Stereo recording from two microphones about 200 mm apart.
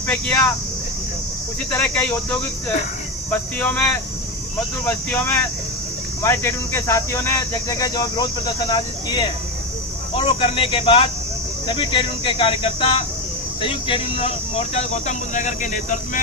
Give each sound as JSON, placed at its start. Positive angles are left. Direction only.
{"t": 0.1, "sound": "speech", "side_deg": 10}
{"t": 1.7, "sound": "speech", "side_deg": 5}
{"t": 4.9, "sound": "speech", "side_deg": 10}